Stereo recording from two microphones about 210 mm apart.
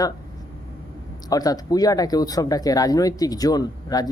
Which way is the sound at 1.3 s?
15° left (ahead or behind).